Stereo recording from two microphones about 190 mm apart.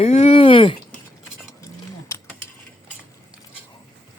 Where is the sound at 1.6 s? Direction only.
15° left (ahead or behind).